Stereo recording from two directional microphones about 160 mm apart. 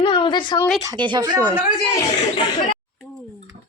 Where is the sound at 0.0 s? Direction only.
30° left (ahead or behind).